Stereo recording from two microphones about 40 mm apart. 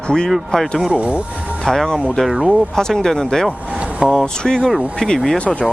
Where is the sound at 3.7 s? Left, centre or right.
Right.